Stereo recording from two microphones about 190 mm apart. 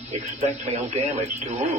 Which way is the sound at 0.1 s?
35° right (ahead or behind).